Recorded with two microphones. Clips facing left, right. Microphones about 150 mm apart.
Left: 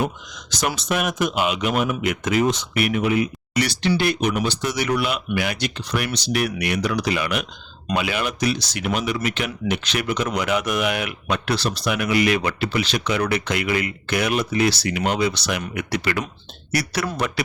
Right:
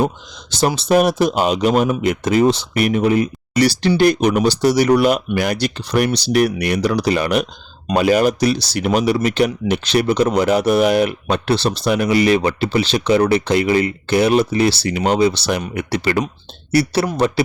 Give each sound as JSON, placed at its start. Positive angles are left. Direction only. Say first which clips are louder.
{"t": 0.8, "sound": "speech", "louder": "right 10 dB", "side_deg": -35}